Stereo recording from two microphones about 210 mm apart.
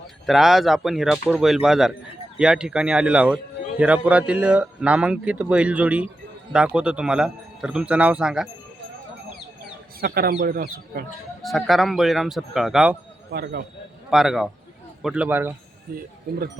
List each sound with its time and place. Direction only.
0.3 s a man's voice: centre (ahead or behind)
10.0 s speech: 45° right (ahead or behind)
11.4 s a man's voice: centre (ahead or behind)
13.3 s speech: 55° right (ahead or behind)
14.1 s a man's voice: centre (ahead or behind)